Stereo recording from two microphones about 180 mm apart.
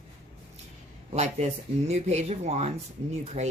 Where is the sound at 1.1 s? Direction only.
40° right (ahead or behind).